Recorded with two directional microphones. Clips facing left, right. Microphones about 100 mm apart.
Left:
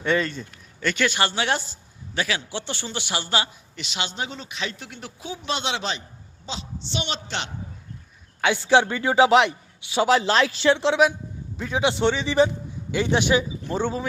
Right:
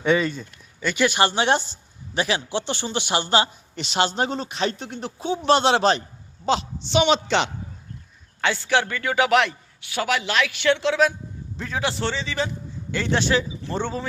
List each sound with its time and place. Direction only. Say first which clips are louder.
0.0 s speech: right 3 dB; 5° right (ahead or behind)
1.0 s speech: right 5 dB; 15° right (ahead or behind)
5.5 s a man's voice: right 10 dB; 40° right (ahead or behind)
6.4 s a woman's voice: right 13 dB; 65° right (ahead or behind)
6.8 s a man's voice: right 11 dB; 85° right
8.4 s a man's voice: left 3 dB; 15° left (ahead or behind)
11.5 s a man's voice: left 3 dB; 10° left (ahead or behind)
11.8 s a man's voice: left 5 dB; 20° left (ahead or behind)